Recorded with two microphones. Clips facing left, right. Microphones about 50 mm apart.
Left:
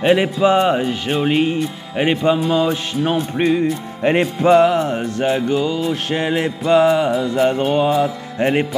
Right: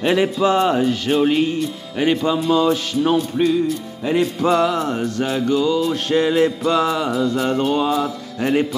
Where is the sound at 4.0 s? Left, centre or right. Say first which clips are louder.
Left 3 dB; left.